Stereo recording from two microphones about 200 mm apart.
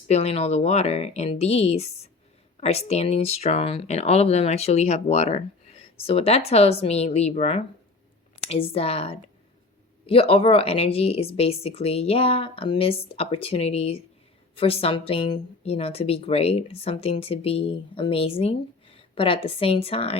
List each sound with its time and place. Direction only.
0.1 s speech: 30° left (ahead or behind)